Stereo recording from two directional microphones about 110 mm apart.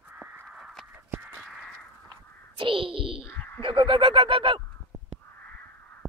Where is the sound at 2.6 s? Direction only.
50° right (ahead or behind).